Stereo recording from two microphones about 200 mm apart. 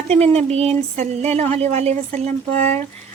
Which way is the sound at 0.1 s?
30° right (ahead or behind).